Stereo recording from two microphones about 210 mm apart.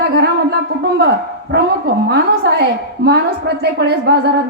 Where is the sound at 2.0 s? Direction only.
50° right (ahead or behind).